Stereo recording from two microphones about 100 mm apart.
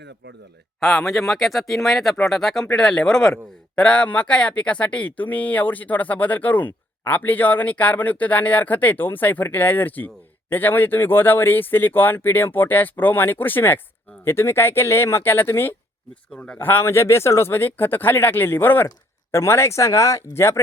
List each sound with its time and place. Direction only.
0.8 s speech: centre (ahead or behind); by 15.7 s 25° left (ahead or behind)
16.3 s speech: 10° left (ahead or behind)
16.6 s speech: 20° left (ahead or behind)